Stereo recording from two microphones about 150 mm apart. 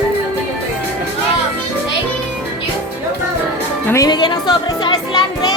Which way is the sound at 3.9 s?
25° left (ahead or behind).